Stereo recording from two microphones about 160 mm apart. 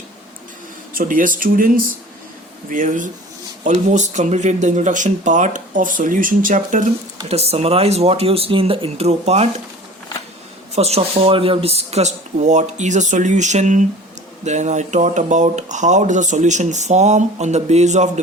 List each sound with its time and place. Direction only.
0.9 s speech: 60° right (ahead or behind)
7.3 s speech: 40° right (ahead or behind)
10.8 s speech: 40° right (ahead or behind)